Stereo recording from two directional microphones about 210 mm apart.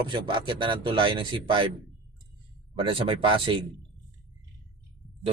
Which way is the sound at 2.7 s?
25° right (ahead or behind).